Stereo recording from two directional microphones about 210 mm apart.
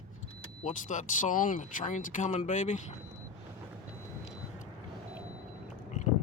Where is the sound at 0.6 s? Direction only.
35° left (ahead or behind).